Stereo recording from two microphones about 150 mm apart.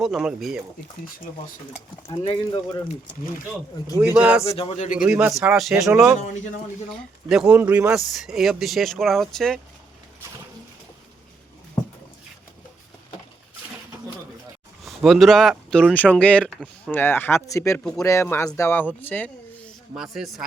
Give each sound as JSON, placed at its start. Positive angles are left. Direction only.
{"t": 0.0, "sound": "speech", "side_deg": -5}
{"t": 2.2, "sound": "speech", "side_deg": 25}
{"t": 3.9, "sound": "speech", "side_deg": -15}
{"t": 4.4, "sound": "speech", "side_deg": 40}
{"t": 4.9, "sound": "speech", "side_deg": -10}
{"t": 6.9, "sound": "speech", "side_deg": -5}
{"t": 14.8, "sound": "speech", "side_deg": 0}
{"t": 19.9, "sound": "speech", "side_deg": -5}